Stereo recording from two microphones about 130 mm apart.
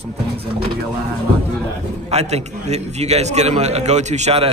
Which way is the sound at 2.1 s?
55° right (ahead or behind).